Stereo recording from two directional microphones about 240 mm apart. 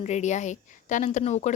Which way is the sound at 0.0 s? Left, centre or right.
Left.